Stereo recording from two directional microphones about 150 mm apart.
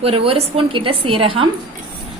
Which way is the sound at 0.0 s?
40° right (ahead or behind).